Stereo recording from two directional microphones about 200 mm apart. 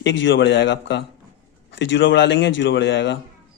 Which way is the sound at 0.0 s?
65° left (ahead or behind).